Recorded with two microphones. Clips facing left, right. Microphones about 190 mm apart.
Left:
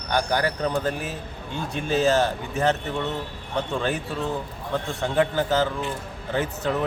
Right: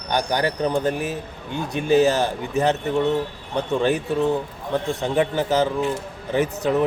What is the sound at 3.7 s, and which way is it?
A man's voice, 20° right (ahead or behind).